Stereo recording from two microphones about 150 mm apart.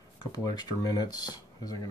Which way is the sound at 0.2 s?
25° left (ahead or behind).